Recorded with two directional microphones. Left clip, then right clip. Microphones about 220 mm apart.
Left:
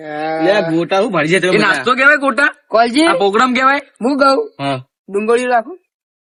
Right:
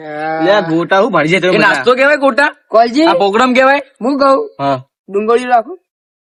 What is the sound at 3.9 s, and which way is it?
Speech, 15° left (ahead or behind).